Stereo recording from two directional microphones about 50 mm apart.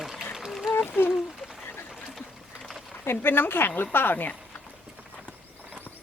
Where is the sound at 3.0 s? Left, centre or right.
Left.